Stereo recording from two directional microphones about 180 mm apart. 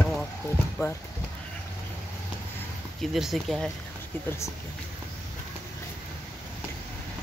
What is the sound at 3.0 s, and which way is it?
Speech, centre (ahead or behind).